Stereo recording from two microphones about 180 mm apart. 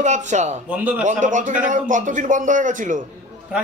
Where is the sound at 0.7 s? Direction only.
10° right (ahead or behind).